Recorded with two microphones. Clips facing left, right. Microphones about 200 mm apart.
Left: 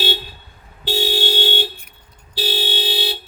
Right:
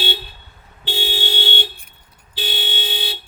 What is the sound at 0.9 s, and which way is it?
Vehicle, 40° left (ahead or behind).